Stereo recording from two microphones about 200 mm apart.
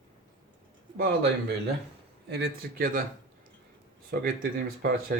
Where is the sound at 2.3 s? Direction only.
50° right (ahead or behind).